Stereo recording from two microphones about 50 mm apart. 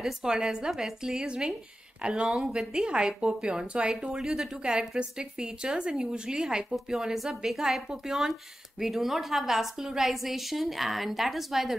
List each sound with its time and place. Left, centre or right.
0.0 s a woman's voice: centre